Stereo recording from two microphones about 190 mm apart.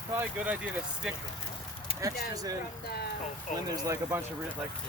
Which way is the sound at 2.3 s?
20° right (ahead or behind).